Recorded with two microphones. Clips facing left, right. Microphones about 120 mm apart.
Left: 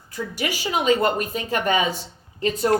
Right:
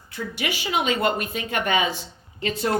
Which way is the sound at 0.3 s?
40° left (ahead or behind).